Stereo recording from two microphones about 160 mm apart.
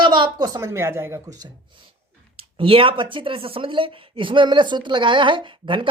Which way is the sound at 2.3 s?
35° right (ahead or behind).